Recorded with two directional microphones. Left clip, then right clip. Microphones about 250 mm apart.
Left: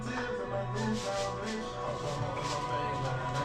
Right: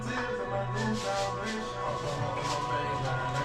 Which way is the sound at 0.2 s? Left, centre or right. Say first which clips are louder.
Right 2 dB; centre.